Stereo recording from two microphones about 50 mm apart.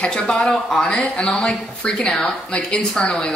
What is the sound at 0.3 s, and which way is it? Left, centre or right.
Speech, centre.